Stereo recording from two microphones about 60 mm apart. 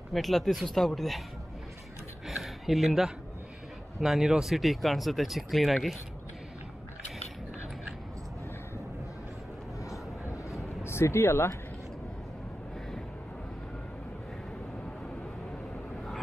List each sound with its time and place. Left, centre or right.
0.1 s speech: centre
2.2 s a sound: centre
4.0 s speech: centre
9.8 s vehicle: left
10.8 s speech: left